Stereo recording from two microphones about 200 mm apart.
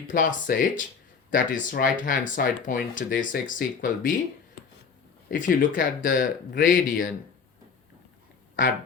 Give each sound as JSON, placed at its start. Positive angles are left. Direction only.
{"t": 0.1, "sound": "speech", "side_deg": 40}
{"t": 5.3, "sound": "speech", "side_deg": 40}
{"t": 8.6, "sound": "speech", "side_deg": 40}